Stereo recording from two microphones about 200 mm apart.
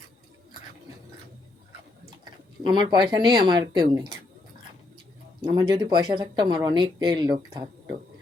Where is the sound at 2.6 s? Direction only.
20° right (ahead or behind).